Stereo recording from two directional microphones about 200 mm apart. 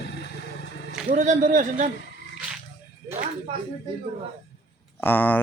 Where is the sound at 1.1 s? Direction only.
35° right (ahead or behind).